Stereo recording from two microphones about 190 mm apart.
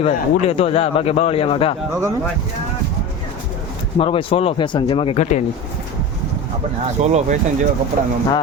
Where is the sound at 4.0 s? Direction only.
30° left (ahead or behind).